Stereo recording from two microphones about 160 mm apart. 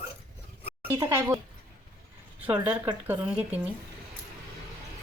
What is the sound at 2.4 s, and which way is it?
Speech, 10° right (ahead or behind).